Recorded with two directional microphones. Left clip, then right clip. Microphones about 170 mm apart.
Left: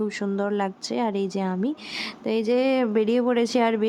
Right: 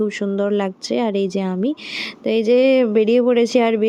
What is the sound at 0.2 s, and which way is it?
A woman's voice, 15° right (ahead or behind).